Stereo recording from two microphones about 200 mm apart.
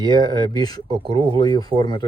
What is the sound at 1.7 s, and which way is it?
Speech, 25° right (ahead or behind).